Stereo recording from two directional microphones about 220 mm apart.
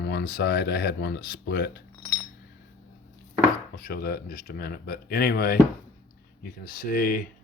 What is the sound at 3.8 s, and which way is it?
Speech, 45° left (ahead or behind).